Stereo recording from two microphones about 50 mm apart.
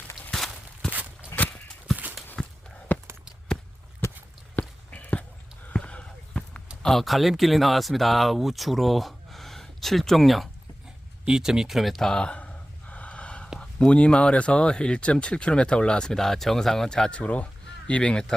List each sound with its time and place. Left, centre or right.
0.3 s walk: centre
1.3 s a sound: left
2.3 s walk: left
4.5 s a sound: left
5.7 s basketball bounce: left
6.8 s speech: centre
11.3 s speech: centre
12.0 s speech: centre
12.9 s snort: left
13.6 s speech: left